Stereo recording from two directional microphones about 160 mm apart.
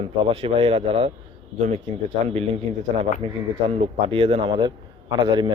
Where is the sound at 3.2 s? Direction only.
35° right (ahead or behind).